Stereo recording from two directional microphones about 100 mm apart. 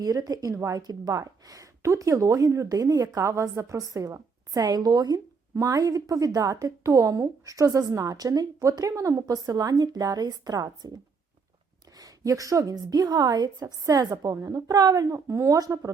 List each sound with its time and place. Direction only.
0.0 s a woman's voice: 40° right (ahead or behind)